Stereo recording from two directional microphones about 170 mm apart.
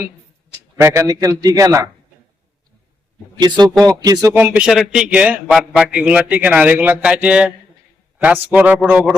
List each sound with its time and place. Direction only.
0.8 s a man's voice: 15° right (ahead or behind)
3.3 s a man's voice: 25° right (ahead or behind)
4.4 s a man's voice: 10° right (ahead or behind)